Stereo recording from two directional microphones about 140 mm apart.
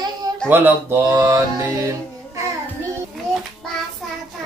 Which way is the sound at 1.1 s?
20° right (ahead or behind).